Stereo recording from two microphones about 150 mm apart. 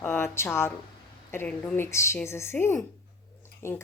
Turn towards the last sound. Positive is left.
turn(degrees=20)  # may be behind; listen again after turning